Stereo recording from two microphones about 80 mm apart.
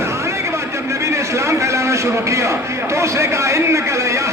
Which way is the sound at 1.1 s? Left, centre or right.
Right.